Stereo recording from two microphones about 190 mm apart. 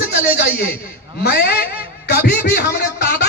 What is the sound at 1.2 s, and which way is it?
Speech, 55° left (ahead or behind).